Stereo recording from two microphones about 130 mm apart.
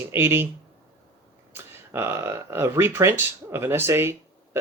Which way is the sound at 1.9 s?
20° right (ahead or behind).